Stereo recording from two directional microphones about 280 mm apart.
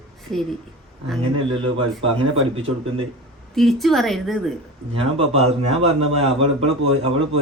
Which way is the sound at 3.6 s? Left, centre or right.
Centre.